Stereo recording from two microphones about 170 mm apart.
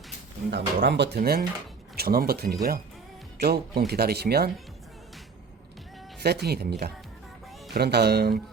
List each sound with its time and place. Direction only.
0.5 s speech: 90° right; by 4.5 s 70° right (ahead or behind)
6.2 s speech: 70° right (ahead or behind)